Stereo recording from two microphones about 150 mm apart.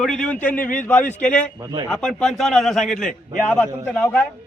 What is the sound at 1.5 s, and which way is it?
Speech, 25° right (ahead or behind).